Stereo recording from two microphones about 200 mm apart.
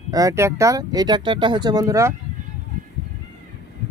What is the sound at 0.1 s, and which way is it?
Speech, 15° right (ahead or behind).